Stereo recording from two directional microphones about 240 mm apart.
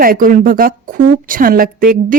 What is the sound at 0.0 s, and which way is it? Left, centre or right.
A woman's voice, right.